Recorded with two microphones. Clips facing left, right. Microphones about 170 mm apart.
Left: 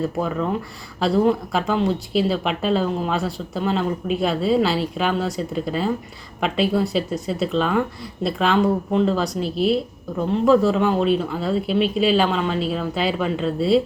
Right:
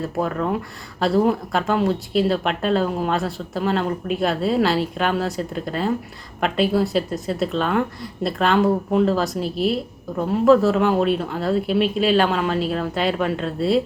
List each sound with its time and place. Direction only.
0.0 s speech: centre (ahead or behind)